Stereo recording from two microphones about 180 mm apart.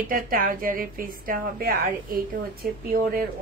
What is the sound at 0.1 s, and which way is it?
A woman's voice, 50° right (ahead or behind).